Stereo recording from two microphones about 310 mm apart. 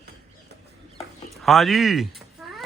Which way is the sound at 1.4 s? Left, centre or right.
Centre.